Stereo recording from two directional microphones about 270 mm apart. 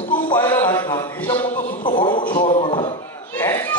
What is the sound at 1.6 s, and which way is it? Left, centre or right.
Speech, left.